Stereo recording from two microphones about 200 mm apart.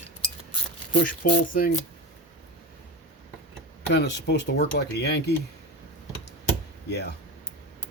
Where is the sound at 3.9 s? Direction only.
60° left (ahead or behind).